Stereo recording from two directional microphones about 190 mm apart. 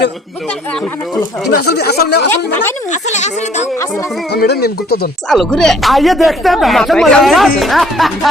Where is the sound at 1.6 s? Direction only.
55° left (ahead or behind).